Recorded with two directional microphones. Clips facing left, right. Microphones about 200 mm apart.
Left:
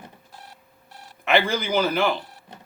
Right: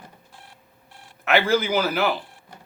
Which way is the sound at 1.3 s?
5° right (ahead or behind).